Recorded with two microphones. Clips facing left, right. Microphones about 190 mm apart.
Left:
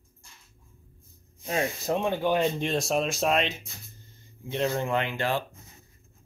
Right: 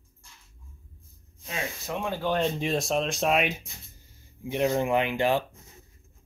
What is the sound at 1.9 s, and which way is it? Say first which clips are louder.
Speech: left 3 dB; 20° left (ahead or behind).